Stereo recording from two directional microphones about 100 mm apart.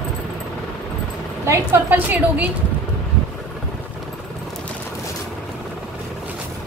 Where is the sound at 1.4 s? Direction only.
30° right (ahead or behind).